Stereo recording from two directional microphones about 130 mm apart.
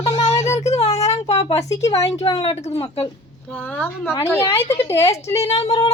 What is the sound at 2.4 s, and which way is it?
Speech, 50° left (ahead or behind).